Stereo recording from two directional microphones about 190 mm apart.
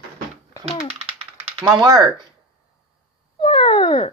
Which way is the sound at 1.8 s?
20° right (ahead or behind).